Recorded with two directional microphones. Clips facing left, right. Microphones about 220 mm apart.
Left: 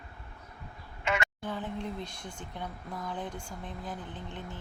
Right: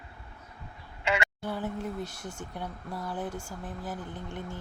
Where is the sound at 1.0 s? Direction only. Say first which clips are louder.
Right 2 dB; 30° right (ahead or behind).